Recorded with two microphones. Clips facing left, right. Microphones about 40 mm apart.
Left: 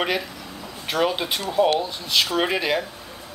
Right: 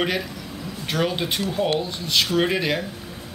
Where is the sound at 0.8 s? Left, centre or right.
Centre.